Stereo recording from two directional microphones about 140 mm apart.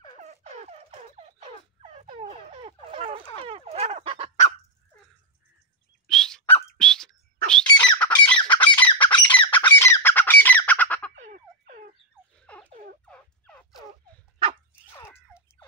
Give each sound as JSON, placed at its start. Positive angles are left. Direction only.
{"t": 0.2, "sound": "turkey", "side_deg": -55}
{"t": 3.3, "sound": "fowl", "side_deg": -45}
{"t": 6.0, "sound": "dog", "side_deg": 5}
{"t": 6.8, "sound": "bird", "side_deg": 5}
{"t": 7.8, "sound": "squawk", "side_deg": 10}
{"t": 11.2, "sound": "a sound", "side_deg": -70}
{"t": 13.0, "sound": "fowl", "side_deg": 10}
{"t": 15.0, "sound": "a sound", "side_deg": 20}